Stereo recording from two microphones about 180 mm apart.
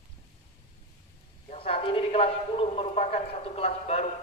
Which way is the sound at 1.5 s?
30° left (ahead or behind).